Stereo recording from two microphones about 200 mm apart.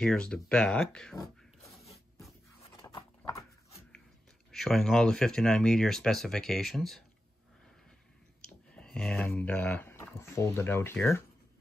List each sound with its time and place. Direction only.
0.0 s speech: 5° left (ahead or behind)
2.6 s a sound: 25° left (ahead or behind)
4.5 s speech: centre (ahead or behind)
8.7 s speech: 5° left (ahead or behind)